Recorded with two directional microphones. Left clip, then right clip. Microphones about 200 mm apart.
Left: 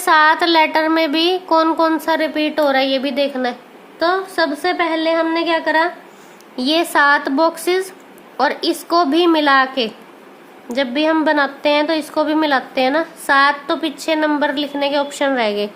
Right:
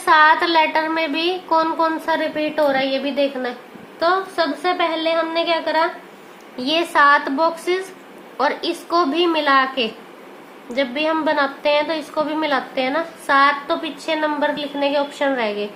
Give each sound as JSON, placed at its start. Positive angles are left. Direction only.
{"t": 0.0, "sound": "a woman's voice", "side_deg": 55}